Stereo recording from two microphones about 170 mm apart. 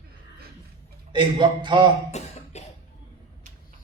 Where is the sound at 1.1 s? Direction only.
25° right (ahead or behind).